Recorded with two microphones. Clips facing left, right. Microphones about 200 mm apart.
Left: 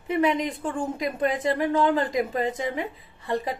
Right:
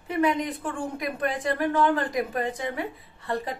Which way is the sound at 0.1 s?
20° left (ahead or behind).